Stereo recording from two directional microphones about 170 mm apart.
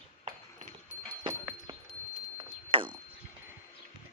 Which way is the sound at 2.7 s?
30° right (ahead or behind).